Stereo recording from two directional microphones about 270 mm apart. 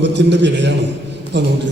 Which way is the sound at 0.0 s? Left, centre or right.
Right.